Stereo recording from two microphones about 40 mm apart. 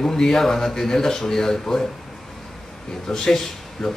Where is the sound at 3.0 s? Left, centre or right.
Centre.